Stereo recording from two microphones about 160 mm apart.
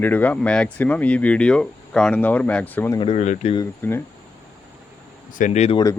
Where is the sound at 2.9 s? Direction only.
40° left (ahead or behind).